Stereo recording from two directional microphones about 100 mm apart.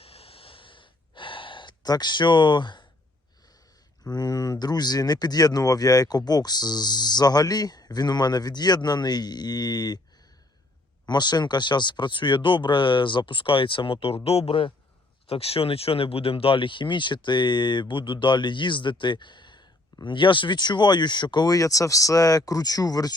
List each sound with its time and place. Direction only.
0.0 s gasp: 75° left (ahead or behind); by 2.8 s 50° left (ahead or behind)
4.0 s speech: 40° left (ahead or behind)
11.0 s speech: 45° left (ahead or behind); by 14.2 s 70° left (ahead or behind)
14.3 s a man's voice: 80° left; by 23.1 s 40° left (ahead or behind)